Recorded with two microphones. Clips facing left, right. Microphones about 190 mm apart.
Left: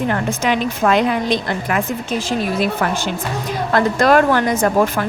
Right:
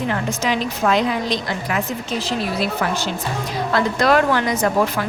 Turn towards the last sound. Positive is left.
turn(degrees=50)  # may be behind; listen again after turning